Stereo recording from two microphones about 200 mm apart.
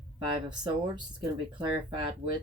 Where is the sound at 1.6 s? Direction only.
25° right (ahead or behind).